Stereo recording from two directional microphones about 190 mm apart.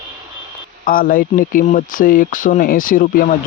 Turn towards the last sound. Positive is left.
turn(degrees=50)  # may be behind; listen again after turning